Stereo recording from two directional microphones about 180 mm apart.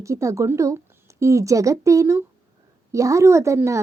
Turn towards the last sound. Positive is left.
turn(degrees=-15)  # may be behind; listen again after turning